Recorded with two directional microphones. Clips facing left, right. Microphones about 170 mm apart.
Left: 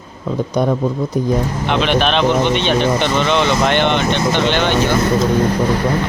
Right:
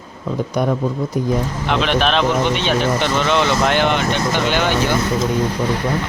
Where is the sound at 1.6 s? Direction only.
Centre (ahead or behind).